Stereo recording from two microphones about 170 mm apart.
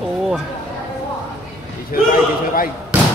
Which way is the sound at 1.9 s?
60° left (ahead or behind).